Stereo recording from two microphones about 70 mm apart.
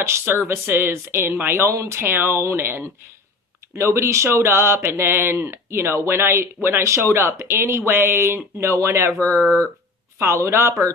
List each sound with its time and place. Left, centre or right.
0.0 s speech: right